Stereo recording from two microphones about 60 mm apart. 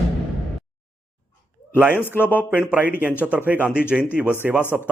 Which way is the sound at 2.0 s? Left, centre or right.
Left.